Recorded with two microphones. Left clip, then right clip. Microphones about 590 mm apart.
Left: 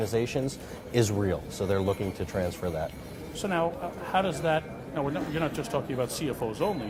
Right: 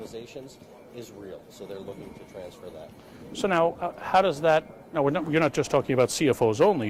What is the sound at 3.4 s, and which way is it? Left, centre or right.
A man's voice, right.